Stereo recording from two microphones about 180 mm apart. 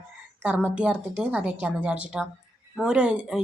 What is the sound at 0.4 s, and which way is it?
Speech, 5° right (ahead or behind).